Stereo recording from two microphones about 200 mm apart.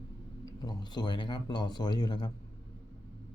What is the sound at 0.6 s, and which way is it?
A man's voice, 20° left (ahead or behind).